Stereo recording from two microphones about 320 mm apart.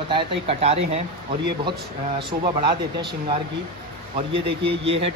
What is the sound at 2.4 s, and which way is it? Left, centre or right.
A man's voice, centre.